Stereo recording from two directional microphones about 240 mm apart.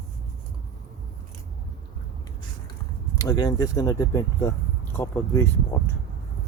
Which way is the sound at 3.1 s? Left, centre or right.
Centre.